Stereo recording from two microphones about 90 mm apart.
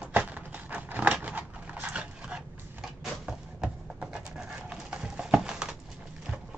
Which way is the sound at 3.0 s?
5° right (ahead or behind).